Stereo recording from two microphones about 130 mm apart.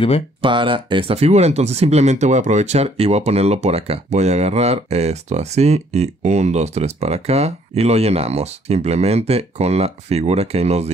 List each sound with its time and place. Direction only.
0.4 s speech: 40° right (ahead or behind)